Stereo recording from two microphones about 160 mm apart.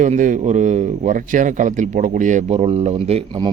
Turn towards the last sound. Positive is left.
turn(degrees=-35)  # may be behind; listen again after turning